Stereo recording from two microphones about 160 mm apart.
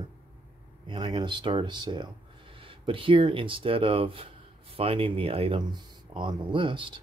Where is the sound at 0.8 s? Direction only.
30° right (ahead or behind).